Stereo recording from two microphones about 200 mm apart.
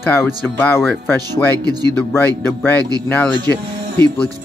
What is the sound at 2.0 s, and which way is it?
Speech, 10° left (ahead or behind).